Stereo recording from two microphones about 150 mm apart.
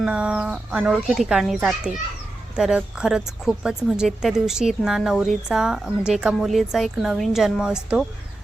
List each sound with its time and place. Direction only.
0.0 s a woman's voice: 5° right (ahead or behind)